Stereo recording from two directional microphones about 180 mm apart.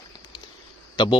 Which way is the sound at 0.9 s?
25° left (ahead or behind).